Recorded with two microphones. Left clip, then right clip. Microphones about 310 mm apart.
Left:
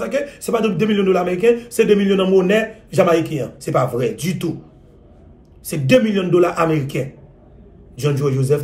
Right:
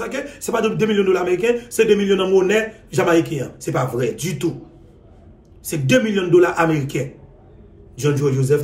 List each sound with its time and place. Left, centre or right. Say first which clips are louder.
0.0 s a man's voice: left 4 dB; centre
5.7 s a man's voice: left 3 dB; centre